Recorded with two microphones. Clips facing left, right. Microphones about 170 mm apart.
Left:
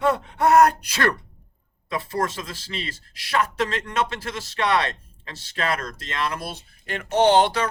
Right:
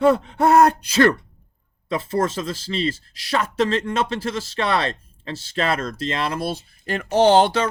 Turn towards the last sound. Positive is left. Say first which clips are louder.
# right 3 dB
turn(degrees=-25)  # may be behind; listen again after turning